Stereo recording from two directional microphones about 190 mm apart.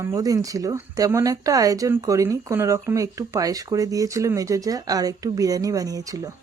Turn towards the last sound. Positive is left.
turn(degrees=-20)  # may be behind; listen again after turning